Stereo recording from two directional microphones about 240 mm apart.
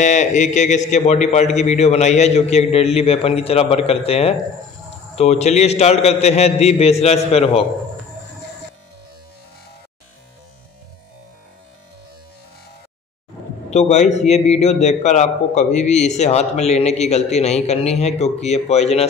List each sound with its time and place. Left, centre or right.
0.0 s a man's voice: left
13.7 s a man's voice: left